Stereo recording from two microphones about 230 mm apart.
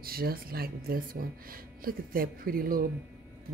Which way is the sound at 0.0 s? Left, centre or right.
Right.